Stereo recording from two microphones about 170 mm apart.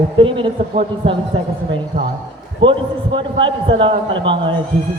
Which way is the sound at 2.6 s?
30° right (ahead or behind).